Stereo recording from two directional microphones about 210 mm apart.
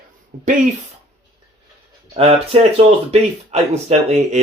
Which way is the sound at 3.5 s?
30° right (ahead or behind).